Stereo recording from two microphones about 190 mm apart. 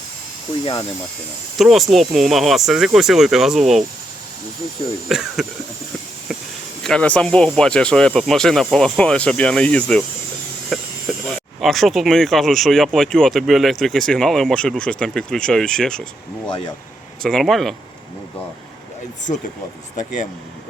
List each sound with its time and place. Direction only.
0.6 s speech: 20° left (ahead or behind)
1.5 s speech: centre (ahead or behind)
5.0 s speech: centre (ahead or behind)
6.8 s speech: 5° left (ahead or behind)
10.7 s a sound: centre (ahead or behind)
11.1 s snake: centre (ahead or behind)
11.6 s speech: centre (ahead or behind)
17.2 s speech: centre (ahead or behind)